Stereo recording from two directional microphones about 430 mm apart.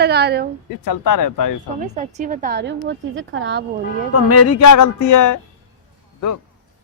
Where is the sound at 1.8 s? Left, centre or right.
Centre.